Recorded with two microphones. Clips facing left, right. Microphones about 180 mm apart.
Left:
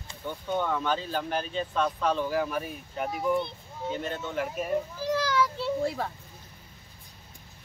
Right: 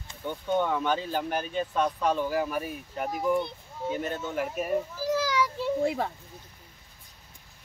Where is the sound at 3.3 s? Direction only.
10° right (ahead or behind).